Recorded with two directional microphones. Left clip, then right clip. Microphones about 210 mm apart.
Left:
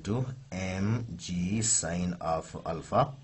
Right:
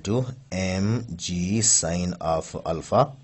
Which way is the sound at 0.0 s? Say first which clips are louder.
Right 8 dB; 30° right (ahead or behind).